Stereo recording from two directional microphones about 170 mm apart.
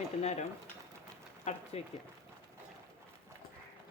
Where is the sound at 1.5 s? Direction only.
40° left (ahead or behind).